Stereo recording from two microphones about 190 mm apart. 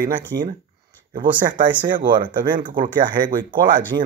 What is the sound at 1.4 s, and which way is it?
Speech, 45° right (ahead or behind).